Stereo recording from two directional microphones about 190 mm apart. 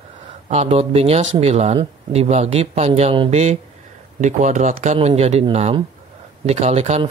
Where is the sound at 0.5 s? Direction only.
35° right (ahead or behind).